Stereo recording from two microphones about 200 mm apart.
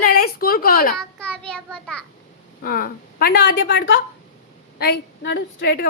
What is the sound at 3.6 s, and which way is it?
Speech, 70° left (ahead or behind).